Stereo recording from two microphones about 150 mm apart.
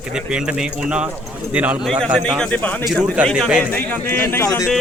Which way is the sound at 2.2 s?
5° left (ahead or behind).